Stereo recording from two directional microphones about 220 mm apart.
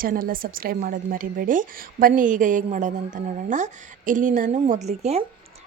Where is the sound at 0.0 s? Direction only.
40° right (ahead or behind).